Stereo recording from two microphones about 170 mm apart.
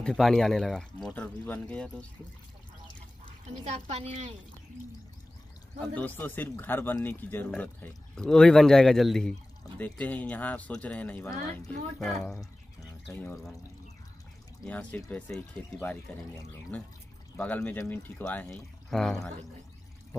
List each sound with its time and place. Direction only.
0.0 s speech: 5° left (ahead or behind)
3.6 s a woman's voice: 40° right (ahead or behind)
5.8 s speech: 10° left (ahead or behind)
13.1 s speech: 15° left (ahead or behind)
14.7 s speech: 10° left (ahead or behind)